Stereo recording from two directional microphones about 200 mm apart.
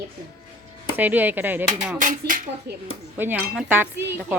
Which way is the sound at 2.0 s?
40° right (ahead or behind).